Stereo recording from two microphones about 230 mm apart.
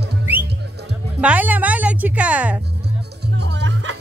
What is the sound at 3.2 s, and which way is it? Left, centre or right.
Music, right.